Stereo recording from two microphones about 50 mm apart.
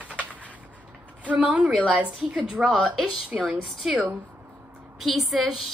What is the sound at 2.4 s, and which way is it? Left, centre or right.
A woman's voice, centre.